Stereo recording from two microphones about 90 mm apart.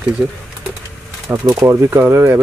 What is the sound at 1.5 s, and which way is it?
Speech, 30° right (ahead or behind).